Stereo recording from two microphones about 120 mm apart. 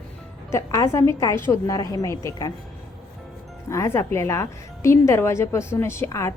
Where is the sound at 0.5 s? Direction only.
25° left (ahead or behind).